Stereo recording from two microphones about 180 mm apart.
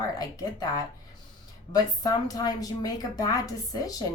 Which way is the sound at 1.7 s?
20° left (ahead or behind).